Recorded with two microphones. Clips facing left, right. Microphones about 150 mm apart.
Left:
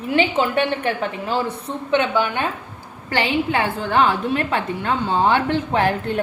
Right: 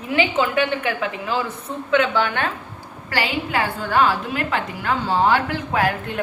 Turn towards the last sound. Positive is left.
turn(degrees=30)  # may be behind; listen again after turning